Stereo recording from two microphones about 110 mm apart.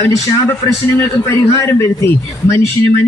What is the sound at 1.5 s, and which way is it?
Speech, 25° left (ahead or behind).